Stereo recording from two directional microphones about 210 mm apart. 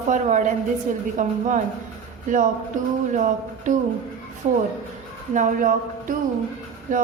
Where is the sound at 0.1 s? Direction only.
35° right (ahead or behind).